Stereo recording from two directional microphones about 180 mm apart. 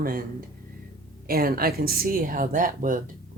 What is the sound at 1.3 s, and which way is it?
Speech, 55° right (ahead or behind).